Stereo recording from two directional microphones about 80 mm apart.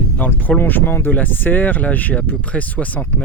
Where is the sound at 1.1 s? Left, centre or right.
Left.